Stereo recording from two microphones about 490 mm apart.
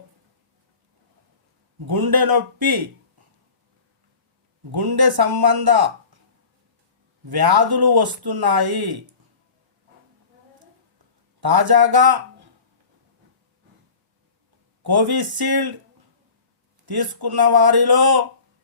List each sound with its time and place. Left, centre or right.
1.8 s speech: right
4.7 s speech: right
7.3 s speech: right
11.3 s speech: right
14.8 s speech: right
16.8 s speech: right